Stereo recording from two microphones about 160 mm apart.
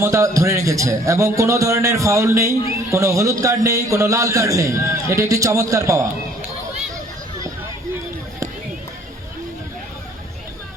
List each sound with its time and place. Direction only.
0.0 s a man's voice: 20° right (ahead or behind)